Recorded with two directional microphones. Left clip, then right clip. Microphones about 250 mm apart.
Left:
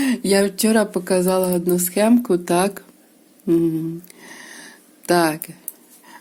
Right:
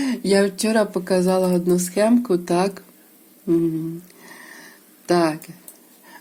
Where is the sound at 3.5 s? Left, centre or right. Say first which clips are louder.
Left 2 dB; centre.